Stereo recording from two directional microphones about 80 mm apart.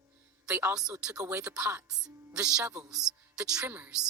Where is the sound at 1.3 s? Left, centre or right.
Centre.